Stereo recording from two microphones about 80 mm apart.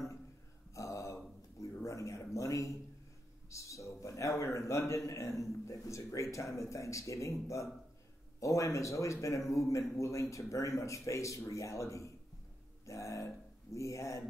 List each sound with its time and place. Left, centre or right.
0.7 s a sound: left
2.3 s a man's voice: left
8.4 s a man's voice: left